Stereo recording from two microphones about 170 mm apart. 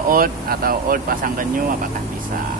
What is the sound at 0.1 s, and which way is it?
Speech, 60° right (ahead or behind).